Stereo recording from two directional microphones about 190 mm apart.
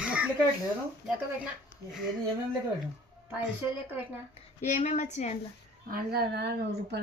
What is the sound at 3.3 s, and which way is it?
Speech, 10° right (ahead or behind).